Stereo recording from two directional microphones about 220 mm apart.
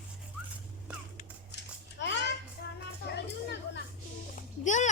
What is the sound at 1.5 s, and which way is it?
Babbling, 55° left (ahead or behind).